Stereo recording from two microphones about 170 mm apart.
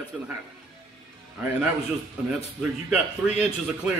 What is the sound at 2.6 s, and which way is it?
Speech, 5° right (ahead or behind).